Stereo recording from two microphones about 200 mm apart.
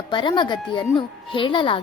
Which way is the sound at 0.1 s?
25° left (ahead or behind).